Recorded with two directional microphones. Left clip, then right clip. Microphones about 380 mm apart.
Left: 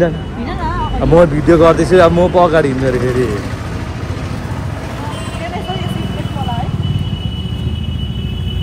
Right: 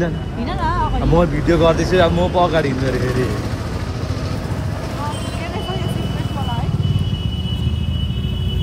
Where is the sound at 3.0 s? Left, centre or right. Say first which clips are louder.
Left 5 dB; left.